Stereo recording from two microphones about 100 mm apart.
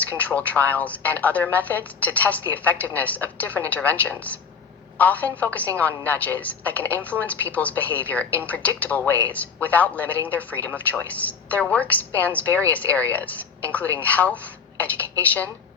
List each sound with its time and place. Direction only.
0.2 s a woman's voice: 15° left (ahead or behind)